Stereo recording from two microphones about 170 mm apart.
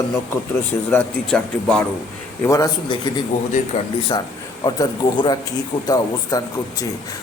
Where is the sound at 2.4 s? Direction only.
20° left (ahead or behind).